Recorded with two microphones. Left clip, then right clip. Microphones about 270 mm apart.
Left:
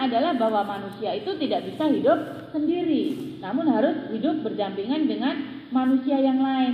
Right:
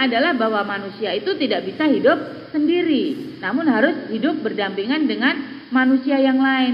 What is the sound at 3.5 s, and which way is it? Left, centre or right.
A woman's voice, right.